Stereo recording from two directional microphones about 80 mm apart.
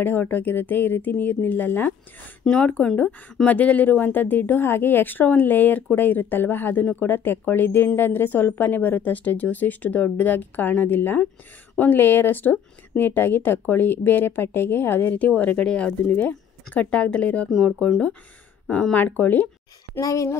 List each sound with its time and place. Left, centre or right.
0.0 s a woman's voice: left
17.5 s speech: centre
18.9 s a woman's voice: left
20.0 s speech: left